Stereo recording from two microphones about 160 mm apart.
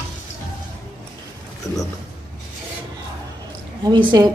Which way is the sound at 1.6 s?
20° left (ahead or behind).